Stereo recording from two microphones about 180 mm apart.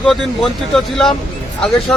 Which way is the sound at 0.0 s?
Centre (ahead or behind).